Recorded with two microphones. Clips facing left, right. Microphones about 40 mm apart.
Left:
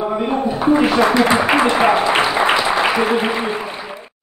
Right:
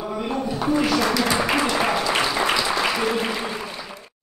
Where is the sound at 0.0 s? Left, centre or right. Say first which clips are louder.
Left 7 dB; left.